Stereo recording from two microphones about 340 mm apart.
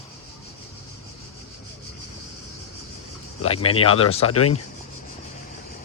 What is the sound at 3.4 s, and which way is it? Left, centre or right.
Speech, left.